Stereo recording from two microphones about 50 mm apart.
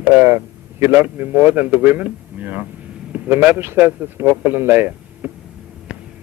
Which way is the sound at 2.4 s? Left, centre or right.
Right.